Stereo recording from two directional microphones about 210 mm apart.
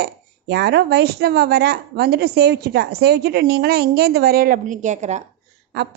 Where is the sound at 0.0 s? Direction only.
50° right (ahead or behind); by 5.2 s 35° right (ahead or behind).